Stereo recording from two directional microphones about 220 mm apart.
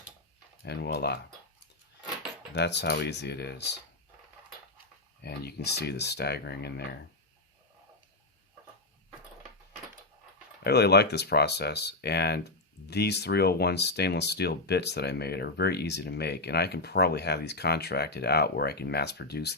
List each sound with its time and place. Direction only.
0.6 s speech: 50° left (ahead or behind)
2.5 s speech: 50° left (ahead or behind)
5.2 s speech: 45° left (ahead or behind)
10.6 s speech: 50° left (ahead or behind)